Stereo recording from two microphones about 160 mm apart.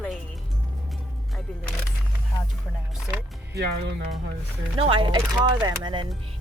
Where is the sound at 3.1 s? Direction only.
10° right (ahead or behind).